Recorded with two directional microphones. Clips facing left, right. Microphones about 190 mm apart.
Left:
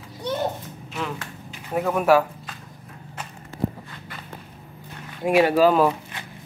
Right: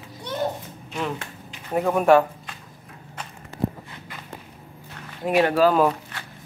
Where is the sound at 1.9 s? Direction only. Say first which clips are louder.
Right 2 dB; 5° left (ahead or behind).